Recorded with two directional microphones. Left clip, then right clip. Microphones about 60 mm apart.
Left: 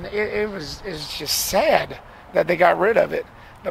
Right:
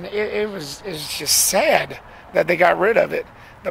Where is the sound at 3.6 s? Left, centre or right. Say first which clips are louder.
Right 2 dB; right.